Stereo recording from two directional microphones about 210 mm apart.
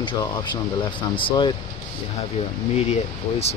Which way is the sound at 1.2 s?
20° left (ahead or behind).